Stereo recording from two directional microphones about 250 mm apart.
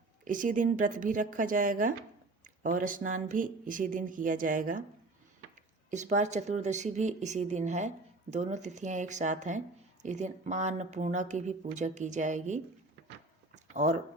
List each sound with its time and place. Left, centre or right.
0.3 s speech: right